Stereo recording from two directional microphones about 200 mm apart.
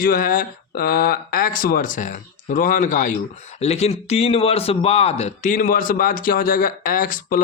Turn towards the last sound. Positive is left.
turn(degrees=45)  # may be behind; listen again after turning